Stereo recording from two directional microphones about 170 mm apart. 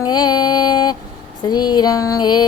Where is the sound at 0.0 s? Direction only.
25° left (ahead or behind).